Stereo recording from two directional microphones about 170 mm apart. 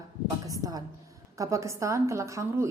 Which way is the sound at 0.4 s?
20° right (ahead or behind).